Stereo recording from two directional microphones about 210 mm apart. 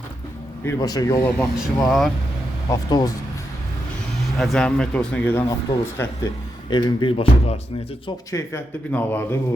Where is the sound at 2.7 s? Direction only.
20° left (ahead or behind).